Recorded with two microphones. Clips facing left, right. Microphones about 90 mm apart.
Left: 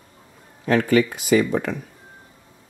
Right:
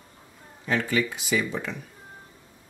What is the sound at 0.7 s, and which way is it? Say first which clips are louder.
Speech: left 8 dB; 55° left (ahead or behind).